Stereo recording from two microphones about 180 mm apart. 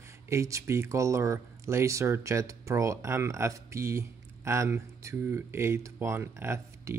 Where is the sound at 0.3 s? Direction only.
15° right (ahead or behind).